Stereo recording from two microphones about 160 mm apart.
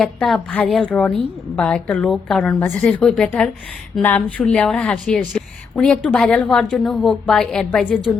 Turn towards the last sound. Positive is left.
turn(degrees=5)  # may be behind; listen again after turning